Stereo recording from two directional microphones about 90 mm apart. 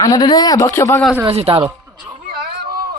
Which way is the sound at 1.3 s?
90° right.